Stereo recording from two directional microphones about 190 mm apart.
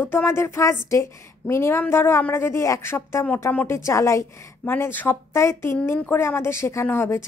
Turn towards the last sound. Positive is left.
turn(degrees=15)  # may be behind; listen again after turning